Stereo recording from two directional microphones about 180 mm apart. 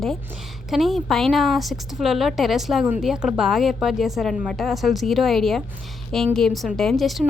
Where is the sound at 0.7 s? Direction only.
Centre (ahead or behind).